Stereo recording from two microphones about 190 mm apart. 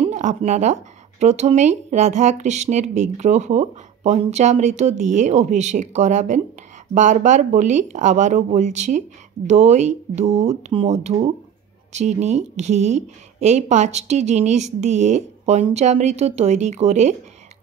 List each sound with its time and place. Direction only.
0.0 s speech: 40° right (ahead or behind)